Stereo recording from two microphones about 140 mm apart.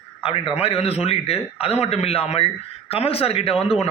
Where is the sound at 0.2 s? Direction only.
40° left (ahead or behind).